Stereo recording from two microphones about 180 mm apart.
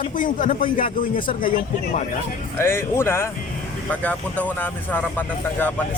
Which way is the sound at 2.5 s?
15° left (ahead or behind).